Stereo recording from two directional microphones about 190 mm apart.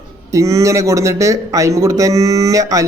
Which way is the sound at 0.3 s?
15° right (ahead or behind).